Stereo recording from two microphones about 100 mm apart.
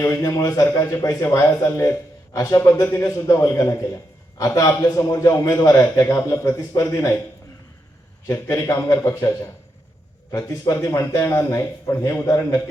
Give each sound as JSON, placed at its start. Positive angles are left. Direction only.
{"t": 0.0, "sound": "a man's voice", "side_deg": 35}
{"t": 8.3, "sound": "a man's voice", "side_deg": 35}
{"t": 10.3, "sound": "a man's voice", "side_deg": 35}